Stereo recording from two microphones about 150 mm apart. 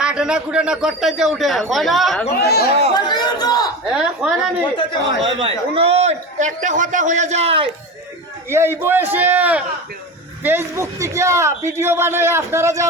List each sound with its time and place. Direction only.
0.0 s a man's voice: 5° right (ahead or behind)
2.4 s speech: 90° left
2.9 s a sound: 30° left (ahead or behind)
3.9 s a man's voice: 5° right (ahead or behind)
5.4 s a man's voice: 40° right (ahead or behind)
8.4 s a man's voice: 15° right (ahead or behind)